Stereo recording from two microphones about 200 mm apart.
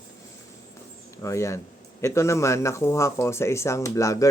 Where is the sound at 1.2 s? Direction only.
15° left (ahead or behind).